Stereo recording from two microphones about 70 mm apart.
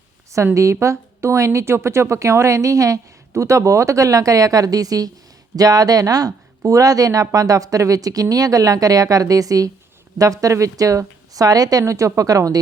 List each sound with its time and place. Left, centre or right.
0.5 s speech: right